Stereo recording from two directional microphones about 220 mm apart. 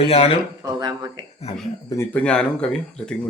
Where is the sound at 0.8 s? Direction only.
20° right (ahead or behind).